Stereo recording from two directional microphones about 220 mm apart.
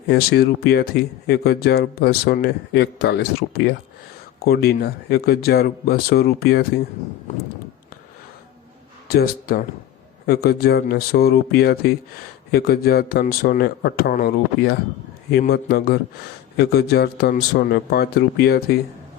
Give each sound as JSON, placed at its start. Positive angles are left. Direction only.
{"t": 0.1, "sound": "a man's voice", "side_deg": 45}
{"t": 9.0, "sound": "a man's voice", "side_deg": 45}